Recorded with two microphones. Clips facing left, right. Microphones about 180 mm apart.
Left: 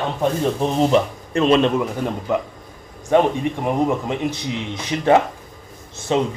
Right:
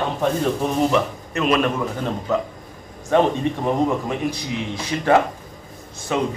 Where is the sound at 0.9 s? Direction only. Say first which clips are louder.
Left 3 dB; 30° left (ahead or behind).